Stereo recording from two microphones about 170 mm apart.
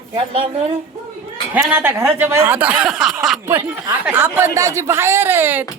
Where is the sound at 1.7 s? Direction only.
10° right (ahead or behind).